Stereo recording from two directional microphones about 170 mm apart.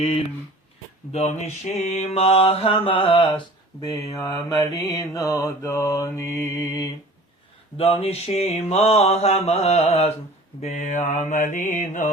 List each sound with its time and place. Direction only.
1.1 s mantra: 40° left (ahead or behind); by 6.9 s 20° left (ahead or behind)
7.8 s mantra: 35° left (ahead or behind)